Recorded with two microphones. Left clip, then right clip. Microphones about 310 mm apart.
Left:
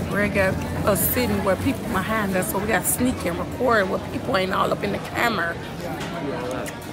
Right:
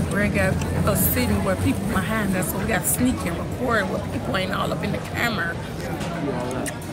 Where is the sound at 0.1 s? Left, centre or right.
Centre.